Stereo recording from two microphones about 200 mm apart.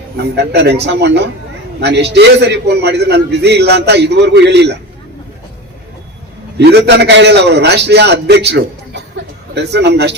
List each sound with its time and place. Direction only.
0.3 s a man's voice: 55° right (ahead or behind)
6.6 s a man's voice: 55° right (ahead or behind)